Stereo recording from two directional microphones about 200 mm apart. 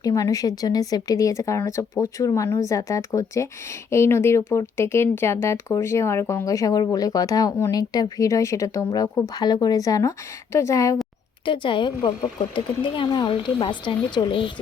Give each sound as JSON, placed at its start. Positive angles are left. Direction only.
{"t": 0.0, "sound": "a woman's voice", "side_deg": 15}